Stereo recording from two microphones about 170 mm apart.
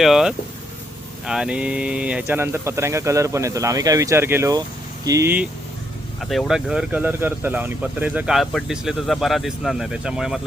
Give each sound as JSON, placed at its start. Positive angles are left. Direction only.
{"t": 0.0, "sound": "speech", "side_deg": 0}
{"t": 6.2, "sound": "speech", "side_deg": 0}